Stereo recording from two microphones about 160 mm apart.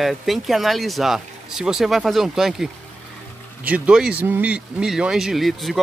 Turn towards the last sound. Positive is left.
turn(degrees=0)  # may be behind; listen again after turning